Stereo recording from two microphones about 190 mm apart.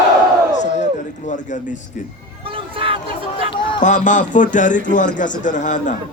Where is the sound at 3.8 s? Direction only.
40° left (ahead or behind).